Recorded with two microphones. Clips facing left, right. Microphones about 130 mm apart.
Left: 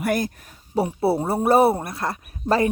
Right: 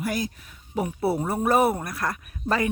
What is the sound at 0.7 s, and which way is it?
Speech, 30° left (ahead or behind).